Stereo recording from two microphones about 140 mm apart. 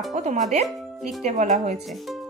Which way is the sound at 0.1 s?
55° right (ahead or behind).